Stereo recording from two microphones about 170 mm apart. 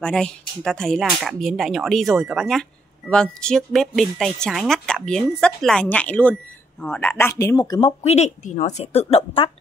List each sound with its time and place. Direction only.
0.0 s speech: 5° left (ahead or behind); by 7.9 s 20° left (ahead or behind)
8.0 s a woman's voice: 40° left (ahead or behind)